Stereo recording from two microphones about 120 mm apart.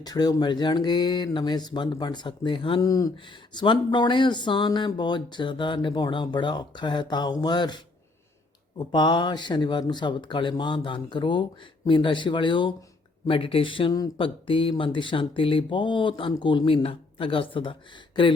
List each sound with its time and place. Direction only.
0.0 s speech: 35° left (ahead or behind)
2.8 s speech: 30° left (ahead or behind)
3.2 s speech: 40° left (ahead or behind)
8.8 s speech: 40° left (ahead or behind)